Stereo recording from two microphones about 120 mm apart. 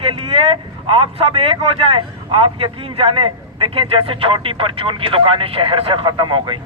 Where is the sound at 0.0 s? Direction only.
50° right (ahead or behind).